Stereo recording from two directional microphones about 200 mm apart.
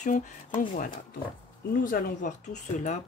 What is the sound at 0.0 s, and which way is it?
Speech, 40° left (ahead or behind).